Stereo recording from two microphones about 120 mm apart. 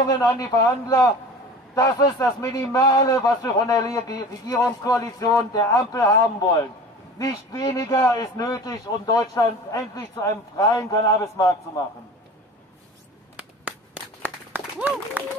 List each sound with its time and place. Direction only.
0.2 s a man's voice: 30° left (ahead or behind)
7.2 s a man's voice: 30° left (ahead or behind)
14.2 s a sound: 15° right (ahead or behind)